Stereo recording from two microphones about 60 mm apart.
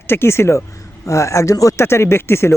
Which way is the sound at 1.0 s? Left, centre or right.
Left.